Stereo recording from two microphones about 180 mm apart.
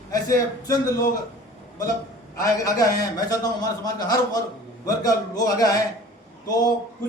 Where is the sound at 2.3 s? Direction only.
20° left (ahead or behind).